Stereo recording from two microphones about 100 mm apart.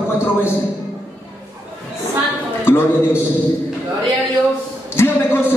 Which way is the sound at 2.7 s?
20° left (ahead or behind).